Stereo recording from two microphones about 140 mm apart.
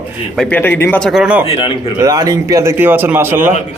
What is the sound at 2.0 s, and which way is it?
Speech, 25° right (ahead or behind).